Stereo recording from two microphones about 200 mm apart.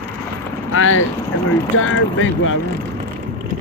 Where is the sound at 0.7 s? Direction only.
85° left.